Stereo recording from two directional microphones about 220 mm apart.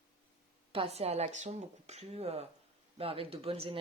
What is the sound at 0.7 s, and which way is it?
Speech, 25° right (ahead or behind).